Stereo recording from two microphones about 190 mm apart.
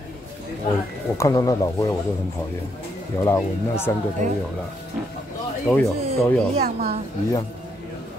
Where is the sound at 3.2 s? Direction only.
15° left (ahead or behind).